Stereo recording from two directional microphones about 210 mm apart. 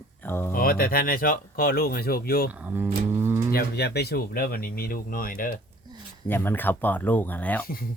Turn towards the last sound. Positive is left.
turn(degrees=10)  # may be behind; listen again after turning